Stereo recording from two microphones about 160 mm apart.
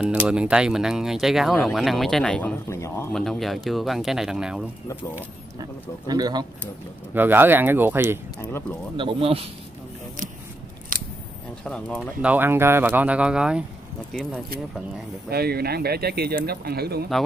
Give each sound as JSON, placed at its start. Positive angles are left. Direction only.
{"t": 0.0, "sound": "speech", "side_deg": -5}
{"t": 3.1, "sound": "speech", "side_deg": 5}
{"t": 5.6, "sound": "speech", "side_deg": -25}
{"t": 7.2, "sound": "speech", "side_deg": -15}
{"t": 8.4, "sound": "speech", "side_deg": 15}
{"t": 8.9, "sound": "speech", "side_deg": -35}
{"t": 10.9, "sound": "scissors", "side_deg": -60}
{"t": 11.6, "sound": "speech", "side_deg": 5}
{"t": 12.2, "sound": "speech", "side_deg": -10}
{"t": 15.2, "sound": "speech", "side_deg": -75}